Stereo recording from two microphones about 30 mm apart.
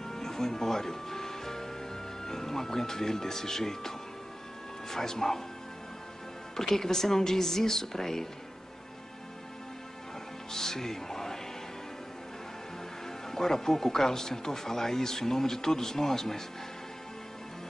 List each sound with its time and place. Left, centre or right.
0.0 s music: centre
2.2 s speech: centre
4.9 s speech: centre
6.7 s speech: centre
10.5 s music: centre
13.3 s speech: centre